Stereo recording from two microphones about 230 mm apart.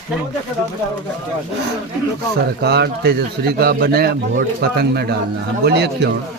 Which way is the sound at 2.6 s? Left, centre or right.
Right.